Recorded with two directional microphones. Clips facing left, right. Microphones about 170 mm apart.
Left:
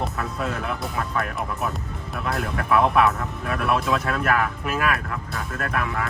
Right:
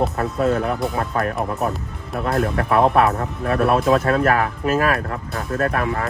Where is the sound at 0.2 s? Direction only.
40° right (ahead or behind).